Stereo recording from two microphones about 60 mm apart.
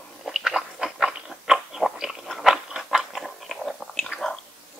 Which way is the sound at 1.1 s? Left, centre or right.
Centre.